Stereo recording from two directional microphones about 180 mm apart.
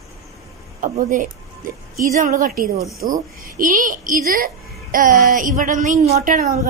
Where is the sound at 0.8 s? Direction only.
45° right (ahead or behind).